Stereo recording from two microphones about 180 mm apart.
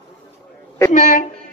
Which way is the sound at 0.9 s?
45° left (ahead or behind).